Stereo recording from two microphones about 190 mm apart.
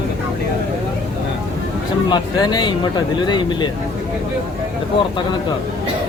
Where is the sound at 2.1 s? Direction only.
20° left (ahead or behind).